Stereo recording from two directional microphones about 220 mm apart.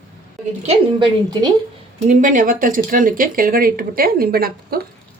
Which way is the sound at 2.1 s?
35° right (ahead or behind).